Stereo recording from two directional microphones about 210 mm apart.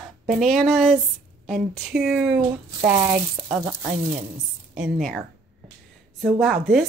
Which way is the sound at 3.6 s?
15° right (ahead or behind).